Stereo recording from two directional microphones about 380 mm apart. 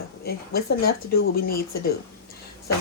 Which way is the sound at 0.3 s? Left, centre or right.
Left.